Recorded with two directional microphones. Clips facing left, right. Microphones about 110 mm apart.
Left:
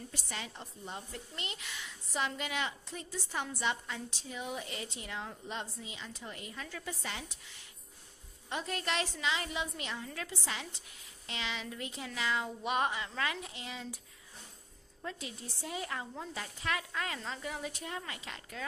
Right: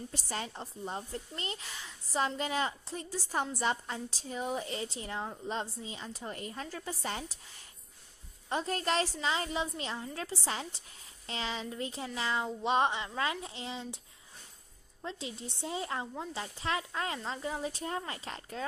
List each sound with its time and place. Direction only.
0.1 s a woman's voice: 35° right (ahead or behind)